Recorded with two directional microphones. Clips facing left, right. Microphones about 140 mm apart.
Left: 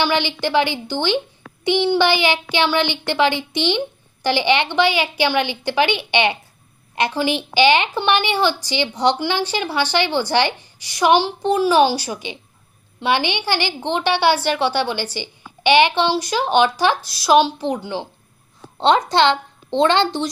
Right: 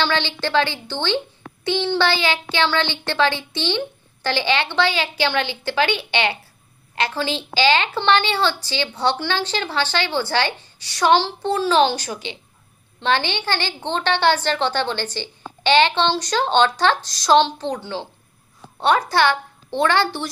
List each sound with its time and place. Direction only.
0.0 s a woman's voice: 15° left (ahead or behind)